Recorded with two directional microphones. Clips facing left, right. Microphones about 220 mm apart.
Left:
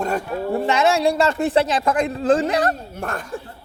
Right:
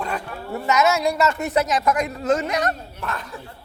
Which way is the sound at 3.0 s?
50° left (ahead or behind).